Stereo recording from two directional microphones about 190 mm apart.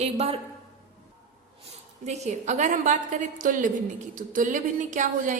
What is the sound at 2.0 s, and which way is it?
A woman's voice, 35° right (ahead or behind).